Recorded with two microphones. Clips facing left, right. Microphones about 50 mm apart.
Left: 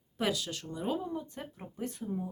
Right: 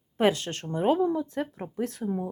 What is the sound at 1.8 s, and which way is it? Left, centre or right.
Speech, right.